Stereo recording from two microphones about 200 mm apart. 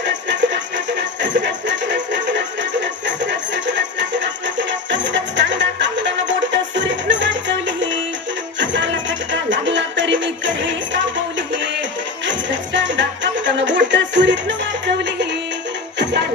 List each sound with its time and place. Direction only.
0.0 s music: 60° right (ahead or behind)